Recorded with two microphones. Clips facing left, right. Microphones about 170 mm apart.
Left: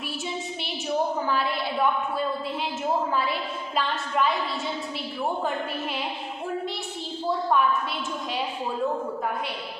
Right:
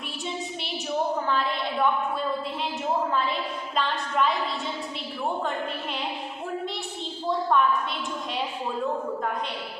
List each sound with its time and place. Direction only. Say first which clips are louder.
1.3 s a woman's voice: even; 5° left (ahead or behind)
7.3 s a woman's voice: even; 5° left (ahead or behind)